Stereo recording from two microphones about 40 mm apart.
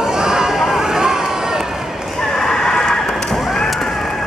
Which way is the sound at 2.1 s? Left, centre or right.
Centre.